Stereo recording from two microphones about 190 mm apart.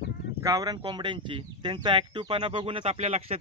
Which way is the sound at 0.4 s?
20° right (ahead or behind).